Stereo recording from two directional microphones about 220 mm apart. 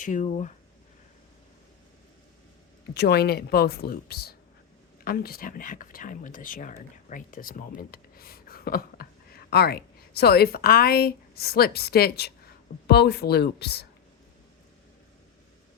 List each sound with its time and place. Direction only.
0.0 s speech: 35° left (ahead or behind)
2.9 s speech: 50° left (ahead or behind)